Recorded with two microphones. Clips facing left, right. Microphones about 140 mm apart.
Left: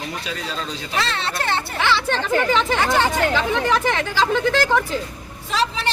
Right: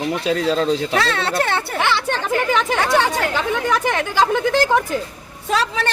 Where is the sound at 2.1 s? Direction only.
15° right (ahead or behind).